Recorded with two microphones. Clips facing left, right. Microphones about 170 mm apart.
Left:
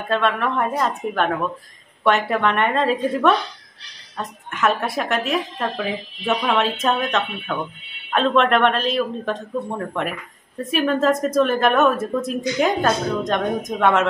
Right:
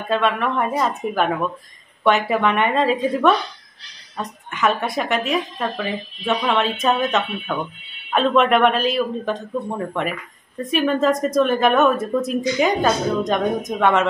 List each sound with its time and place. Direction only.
0.1 s speech: centre (ahead or behind)